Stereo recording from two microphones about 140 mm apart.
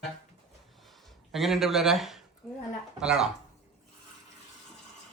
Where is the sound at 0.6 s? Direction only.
Centre (ahead or behind).